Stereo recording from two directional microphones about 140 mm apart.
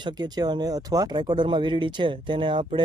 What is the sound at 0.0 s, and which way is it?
Speech, 30° right (ahead or behind).